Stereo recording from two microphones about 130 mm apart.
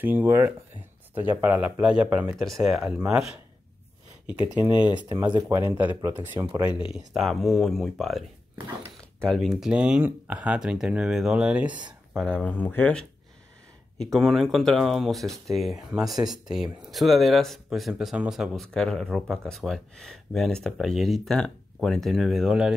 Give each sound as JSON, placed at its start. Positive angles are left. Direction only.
{"t": 0.0, "sound": "speech", "side_deg": -15}
{"t": 2.3, "sound": "speech", "side_deg": 0}
{"t": 7.2, "sound": "speech", "side_deg": 0}
{"t": 9.2, "sound": "speech", "side_deg": 5}
{"t": 12.2, "sound": "speech", "side_deg": 10}
{"t": 13.9, "sound": "speech", "side_deg": 0}
{"t": 16.0, "sound": "speech", "side_deg": -30}
{"t": 16.4, "sound": "speech", "side_deg": -5}